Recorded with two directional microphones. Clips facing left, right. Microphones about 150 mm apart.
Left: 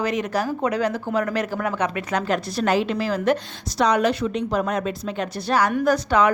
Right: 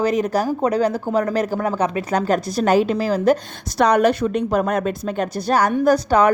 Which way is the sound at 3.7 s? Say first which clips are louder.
Right 4 dB; 55° right (ahead or behind).